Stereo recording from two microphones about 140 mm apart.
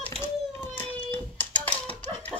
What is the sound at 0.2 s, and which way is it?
Hands, 15° left (ahead or behind).